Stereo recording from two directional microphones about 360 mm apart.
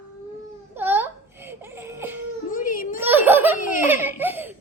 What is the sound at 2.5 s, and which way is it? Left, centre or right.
Children playing, left.